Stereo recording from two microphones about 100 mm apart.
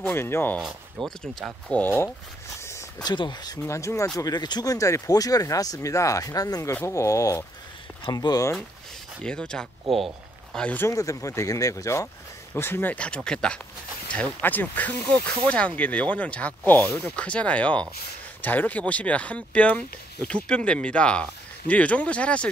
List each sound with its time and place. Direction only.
0.0 s speech: 25° left (ahead or behind)
0.6 s speech: 5° right (ahead or behind)
1.2 s speech: 10° left (ahead or behind)
2.6 s a sound: 30° left (ahead or behind)
3.0 s speech: 45° left (ahead or behind)
3.6 s speech: 30° left (ahead or behind)
4.2 s speech: 45° left (ahead or behind)
6.7 s speech: 25° left (ahead or behind); by 8.5 s 40° left (ahead or behind)
9.2 s speech: 10° left (ahead or behind)
10.8 s speech: 35° left (ahead or behind)
12.9 s speech: 10° left (ahead or behind)